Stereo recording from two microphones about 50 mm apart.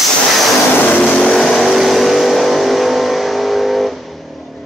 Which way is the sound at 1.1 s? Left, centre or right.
Centre.